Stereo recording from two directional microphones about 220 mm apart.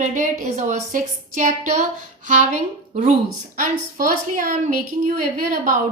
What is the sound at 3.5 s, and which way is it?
A woman's voice, 40° right (ahead or behind).